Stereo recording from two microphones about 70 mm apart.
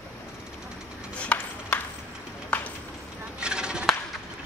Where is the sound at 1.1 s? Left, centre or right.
Centre.